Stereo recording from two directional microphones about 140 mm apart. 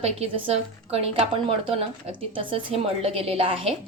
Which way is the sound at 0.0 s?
45° right (ahead or behind).